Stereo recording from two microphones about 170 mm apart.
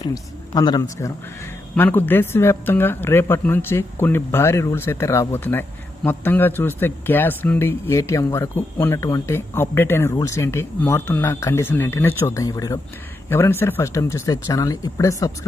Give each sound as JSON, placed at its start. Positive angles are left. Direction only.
{"t": 0.0, "sound": "a man's voice", "side_deg": 25}
{"t": 1.7, "sound": "speech", "side_deg": 10}